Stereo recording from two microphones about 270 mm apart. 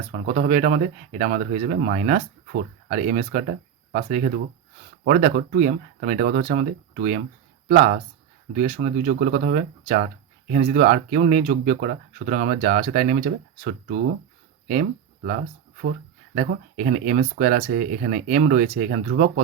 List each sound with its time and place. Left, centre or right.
0.1 s speech: right
8.5 s speech: right
14.7 s speech: right